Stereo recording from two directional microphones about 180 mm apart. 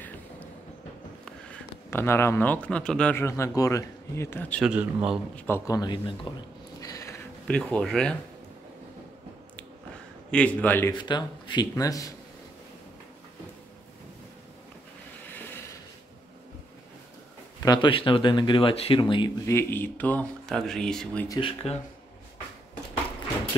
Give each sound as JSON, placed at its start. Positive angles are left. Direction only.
{"t": 1.9, "sound": "a man's voice", "side_deg": 15}
{"t": 4.6, "sound": "speech", "side_deg": -5}
{"t": 5.3, "sound": "speech", "side_deg": 15}
{"t": 6.8, "sound": "a sound", "side_deg": 15}
{"t": 7.4, "sound": "speech", "side_deg": 5}
{"t": 10.3, "sound": "a man's voice", "side_deg": 10}
{"t": 11.0, "sound": "speech", "side_deg": 25}
{"t": 17.6, "sound": "speech", "side_deg": 30}
{"t": 19.4, "sound": "a man's voice", "side_deg": 15}
{"t": 21.3, "sound": "speech", "side_deg": 30}